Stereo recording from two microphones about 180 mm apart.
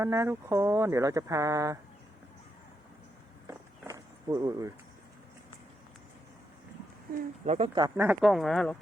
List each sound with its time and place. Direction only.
0.0 s speech: 15° right (ahead or behind)
3.4 s walk: 20° right (ahead or behind)
7.4 s speech: 35° right (ahead or behind)
7.8 s speech: 20° right (ahead or behind)
8.0 s speech: 5° right (ahead or behind)